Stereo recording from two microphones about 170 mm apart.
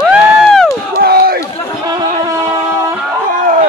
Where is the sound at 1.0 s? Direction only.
65° right (ahead or behind).